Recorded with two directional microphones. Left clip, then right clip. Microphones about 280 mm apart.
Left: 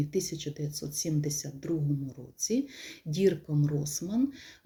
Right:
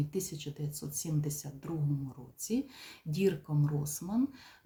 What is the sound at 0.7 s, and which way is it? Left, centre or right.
Speech, right.